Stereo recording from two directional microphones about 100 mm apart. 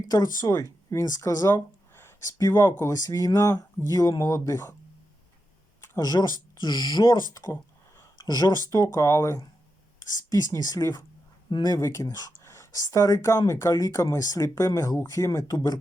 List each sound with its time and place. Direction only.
0.1 s speech: 40° left (ahead or behind)
1.5 s a sound: 25° left (ahead or behind)
2.4 s speech: 35° left (ahead or behind)
6.0 s speech: 40° left (ahead or behind)
11.4 s speech: 45° left (ahead or behind)